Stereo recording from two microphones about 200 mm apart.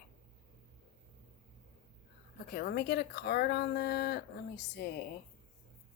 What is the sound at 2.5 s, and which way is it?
Speech, 50° left (ahead or behind).